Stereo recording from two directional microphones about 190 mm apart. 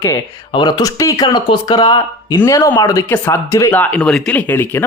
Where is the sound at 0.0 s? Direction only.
20° left (ahead or behind).